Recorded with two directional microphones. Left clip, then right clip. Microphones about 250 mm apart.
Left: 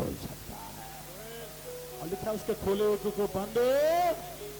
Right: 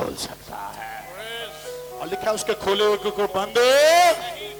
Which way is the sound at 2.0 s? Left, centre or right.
Right.